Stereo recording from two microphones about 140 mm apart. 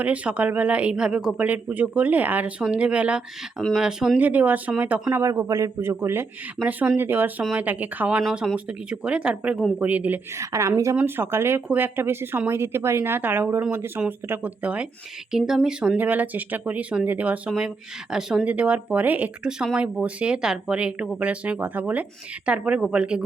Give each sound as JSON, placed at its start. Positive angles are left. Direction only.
{"t": 0.0, "sound": "speech", "side_deg": -10}
{"t": 5.1, "sound": "a man's voice", "side_deg": -20}